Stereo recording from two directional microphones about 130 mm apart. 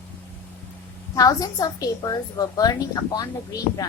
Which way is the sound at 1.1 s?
30° left (ahead or behind).